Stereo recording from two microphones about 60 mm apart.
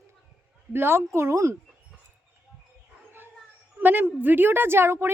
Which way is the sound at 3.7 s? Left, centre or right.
Right.